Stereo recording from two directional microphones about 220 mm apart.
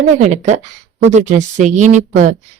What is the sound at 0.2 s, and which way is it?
Speech, 30° right (ahead or behind).